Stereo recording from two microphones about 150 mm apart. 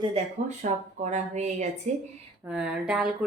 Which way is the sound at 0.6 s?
65° right (ahead or behind).